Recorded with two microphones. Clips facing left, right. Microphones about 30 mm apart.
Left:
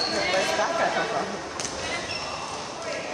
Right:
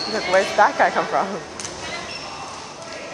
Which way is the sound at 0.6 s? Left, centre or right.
Right.